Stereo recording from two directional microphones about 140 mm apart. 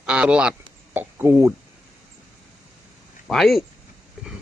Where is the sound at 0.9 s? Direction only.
15° right (ahead or behind).